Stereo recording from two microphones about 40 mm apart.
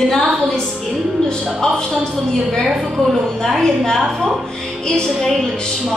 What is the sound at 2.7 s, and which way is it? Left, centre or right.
Speech, centre.